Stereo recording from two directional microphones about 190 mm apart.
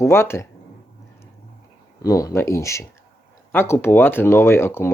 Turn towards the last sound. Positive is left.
turn(degrees=15)  # may be behind; listen again after turning